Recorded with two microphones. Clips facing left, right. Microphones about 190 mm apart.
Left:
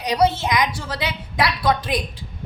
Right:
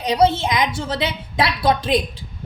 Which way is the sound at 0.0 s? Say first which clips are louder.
Right 2 dB; 25° right (ahead or behind).